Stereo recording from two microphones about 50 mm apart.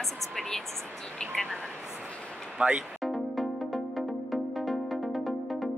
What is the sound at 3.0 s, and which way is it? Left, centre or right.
Music, centre.